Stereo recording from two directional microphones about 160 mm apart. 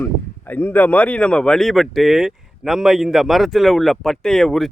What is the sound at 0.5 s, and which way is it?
Speech, 10° left (ahead or behind).